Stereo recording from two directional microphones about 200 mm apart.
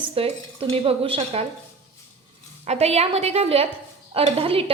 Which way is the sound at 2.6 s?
30° right (ahead or behind).